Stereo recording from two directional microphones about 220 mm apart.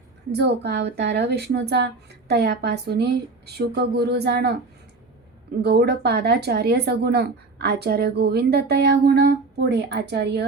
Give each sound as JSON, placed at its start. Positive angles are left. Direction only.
{"t": 0.3, "sound": "speech", "side_deg": -50}
{"t": 5.6, "sound": "speech", "side_deg": -45}